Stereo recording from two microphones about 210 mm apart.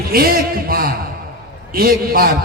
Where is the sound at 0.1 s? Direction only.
45° right (ahead or behind).